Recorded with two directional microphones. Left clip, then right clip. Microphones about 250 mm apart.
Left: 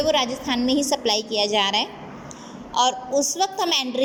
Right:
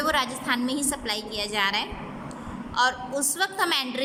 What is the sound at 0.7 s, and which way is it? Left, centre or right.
A woman's voice, centre.